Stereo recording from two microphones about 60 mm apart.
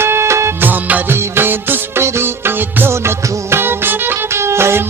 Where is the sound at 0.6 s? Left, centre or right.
Right.